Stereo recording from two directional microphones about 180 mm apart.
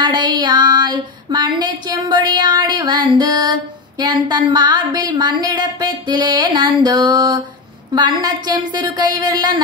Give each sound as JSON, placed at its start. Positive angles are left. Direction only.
{"t": 0.0, "sound": "female singing", "side_deg": -25}